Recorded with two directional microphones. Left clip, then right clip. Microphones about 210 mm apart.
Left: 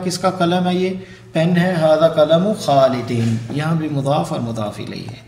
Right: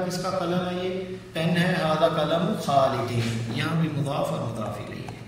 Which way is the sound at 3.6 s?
40° left (ahead or behind).